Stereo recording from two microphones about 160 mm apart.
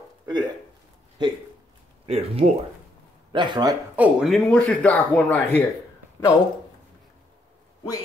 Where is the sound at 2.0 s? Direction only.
40° right (ahead or behind).